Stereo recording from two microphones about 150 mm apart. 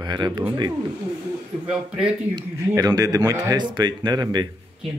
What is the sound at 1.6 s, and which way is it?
Music, 5° right (ahead or behind).